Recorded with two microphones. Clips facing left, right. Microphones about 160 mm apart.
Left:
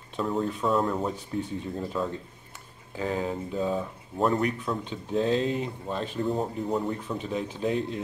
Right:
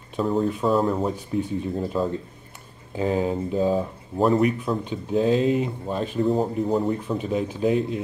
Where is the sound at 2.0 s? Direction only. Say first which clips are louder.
Right 5 dB; 30° right (ahead or behind).